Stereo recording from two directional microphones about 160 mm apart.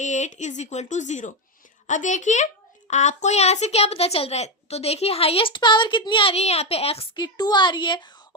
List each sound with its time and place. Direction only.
0.0 s a child's voice: 50° left (ahead or behind); by 8.1 s 30° left (ahead or behind)